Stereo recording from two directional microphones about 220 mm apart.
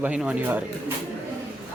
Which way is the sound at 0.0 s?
5° right (ahead or behind).